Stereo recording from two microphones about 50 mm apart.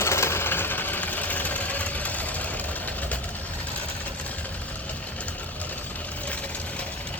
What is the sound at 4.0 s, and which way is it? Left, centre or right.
Vehicle, left.